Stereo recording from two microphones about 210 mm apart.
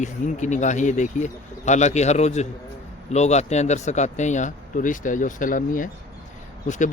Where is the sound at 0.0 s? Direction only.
35° left (ahead or behind).